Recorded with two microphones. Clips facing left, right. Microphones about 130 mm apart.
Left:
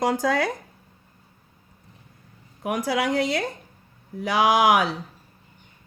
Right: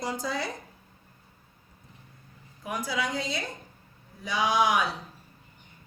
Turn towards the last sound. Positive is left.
turn(degrees=80)